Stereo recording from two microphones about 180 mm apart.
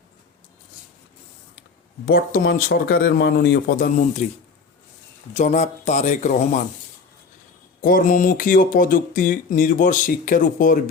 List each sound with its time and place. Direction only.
2.0 s speech: 55° left (ahead or behind)
5.3 s speech: 40° left (ahead or behind)
7.8 s speech: 50° left (ahead or behind)